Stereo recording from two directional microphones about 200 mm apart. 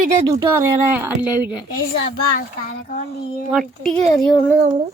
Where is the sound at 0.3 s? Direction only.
15° right (ahead or behind).